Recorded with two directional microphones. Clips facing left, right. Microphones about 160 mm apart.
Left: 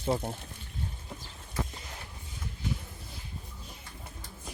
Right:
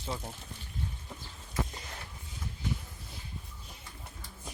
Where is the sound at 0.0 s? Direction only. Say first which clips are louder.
Left 8 dB; 55° left (ahead or behind).